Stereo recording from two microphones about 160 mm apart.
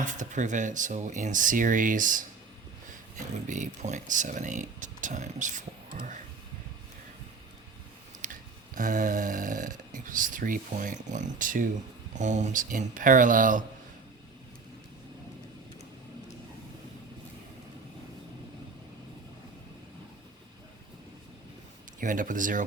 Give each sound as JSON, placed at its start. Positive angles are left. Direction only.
{"t": 0.0, "sound": "speech", "side_deg": -50}
{"t": 8.2, "sound": "snoring", "side_deg": -55}
{"t": 12.1, "sound": "speech", "side_deg": -50}
{"t": 22.0, "sound": "speech", "side_deg": -55}